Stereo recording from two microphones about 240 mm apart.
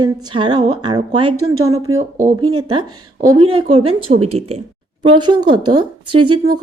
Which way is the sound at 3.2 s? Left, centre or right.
Centre.